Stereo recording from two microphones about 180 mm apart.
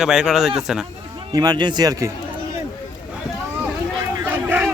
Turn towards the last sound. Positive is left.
turn(degrees=-10)  # may be behind; listen again after turning